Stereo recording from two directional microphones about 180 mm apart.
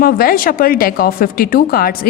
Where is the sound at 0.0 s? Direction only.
55° left (ahead or behind).